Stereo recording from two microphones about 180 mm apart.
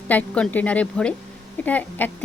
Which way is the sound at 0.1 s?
10° left (ahead or behind).